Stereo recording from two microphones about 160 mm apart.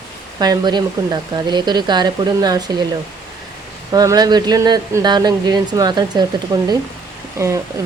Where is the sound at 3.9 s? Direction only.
25° right (ahead or behind).